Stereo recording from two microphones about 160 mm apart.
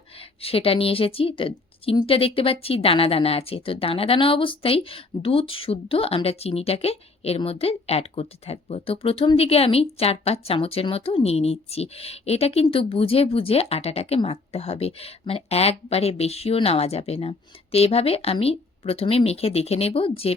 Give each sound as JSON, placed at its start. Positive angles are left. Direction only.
{"t": 0.4, "sound": "a woman's voice", "side_deg": 35}